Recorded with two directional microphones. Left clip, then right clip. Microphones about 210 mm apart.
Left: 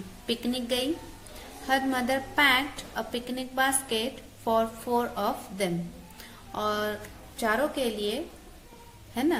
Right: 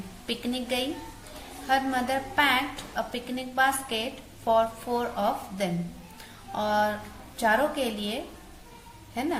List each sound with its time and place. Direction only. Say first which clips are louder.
0.3 s a woman's voice: left 1 dB; 25° left (ahead or behind)